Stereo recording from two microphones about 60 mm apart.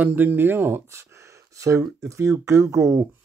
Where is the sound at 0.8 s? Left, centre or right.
Right.